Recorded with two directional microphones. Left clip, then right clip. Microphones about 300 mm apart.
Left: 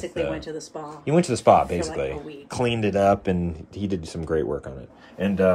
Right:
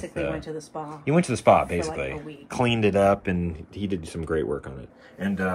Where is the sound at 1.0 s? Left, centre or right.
Centre.